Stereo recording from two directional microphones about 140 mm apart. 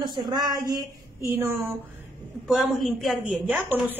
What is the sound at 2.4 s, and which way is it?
A woman's voice, centre (ahead or behind).